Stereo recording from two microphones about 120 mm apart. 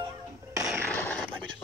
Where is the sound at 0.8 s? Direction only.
10° left (ahead or behind).